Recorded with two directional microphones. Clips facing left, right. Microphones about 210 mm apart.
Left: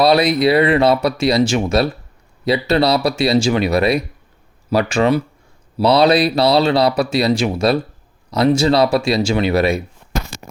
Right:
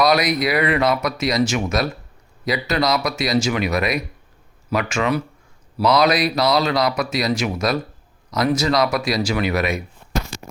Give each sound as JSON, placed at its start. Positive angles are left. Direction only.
{"t": 0.0, "sound": "speech", "side_deg": 30}